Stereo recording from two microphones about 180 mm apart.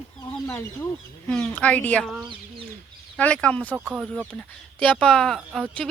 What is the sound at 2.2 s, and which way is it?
Speech, 30° right (ahead or behind).